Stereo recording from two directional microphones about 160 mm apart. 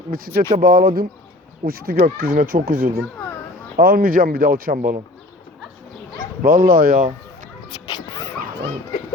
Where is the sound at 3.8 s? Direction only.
65° right (ahead or behind).